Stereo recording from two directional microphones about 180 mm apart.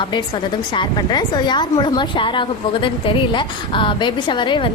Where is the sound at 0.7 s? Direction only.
25° left (ahead or behind).